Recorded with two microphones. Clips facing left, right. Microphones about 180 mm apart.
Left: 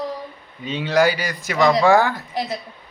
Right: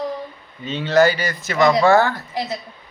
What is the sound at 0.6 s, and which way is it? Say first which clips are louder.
Speech: right 2 dB; 10° left (ahead or behind).